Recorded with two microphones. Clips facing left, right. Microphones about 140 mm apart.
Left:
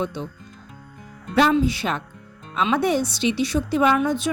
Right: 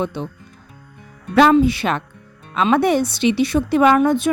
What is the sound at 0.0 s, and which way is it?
Speech, 65° right (ahead or behind).